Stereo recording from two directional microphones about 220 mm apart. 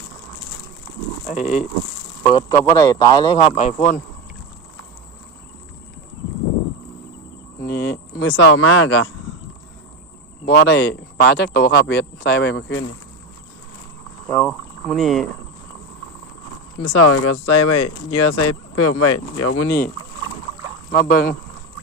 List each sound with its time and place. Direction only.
1.3 s speech: 5° right (ahead or behind)
2.2 s speech: 20° left (ahead or behind); by 4.0 s 35° left (ahead or behind)
7.6 s a sound: 45° left (ahead or behind)
10.4 s speech: 45° left (ahead or behind)
14.3 s speech: 5° left (ahead or behind)
16.9 s speech: 90° left
18.1 s speech: 80° left
20.9 s speech: 45° left (ahead or behind)